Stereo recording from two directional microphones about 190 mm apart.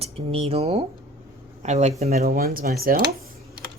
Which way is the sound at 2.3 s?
50° right (ahead or behind).